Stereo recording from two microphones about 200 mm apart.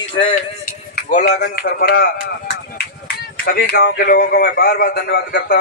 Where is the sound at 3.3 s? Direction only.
50° left (ahead or behind).